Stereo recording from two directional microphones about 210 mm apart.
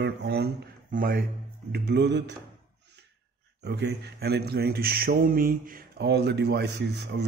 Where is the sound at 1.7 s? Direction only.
55° right (ahead or behind).